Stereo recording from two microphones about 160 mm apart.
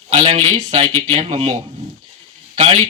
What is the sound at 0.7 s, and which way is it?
Speech, 45° right (ahead or behind).